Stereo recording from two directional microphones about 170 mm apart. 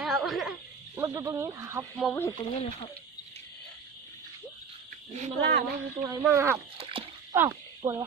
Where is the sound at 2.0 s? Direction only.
10° left (ahead or behind).